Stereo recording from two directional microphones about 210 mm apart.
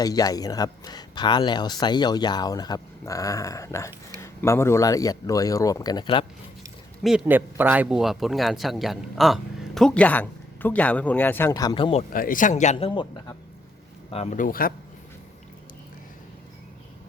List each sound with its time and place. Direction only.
0.0 s speech: 20° left (ahead or behind)
7.0 s a man's voice: 5° right (ahead or behind); by 12.0 s 25° left (ahead or behind)
12.1 s a man's voice: 40° left (ahead or behind)
12.9 s a man's voice: 20° left (ahead or behind); by 14.7 s 40° left (ahead or behind)